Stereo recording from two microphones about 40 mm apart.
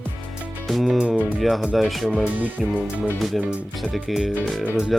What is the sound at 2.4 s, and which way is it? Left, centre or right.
Speech, right.